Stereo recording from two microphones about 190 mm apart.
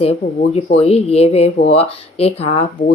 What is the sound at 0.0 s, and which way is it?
Speech, 30° left (ahead or behind).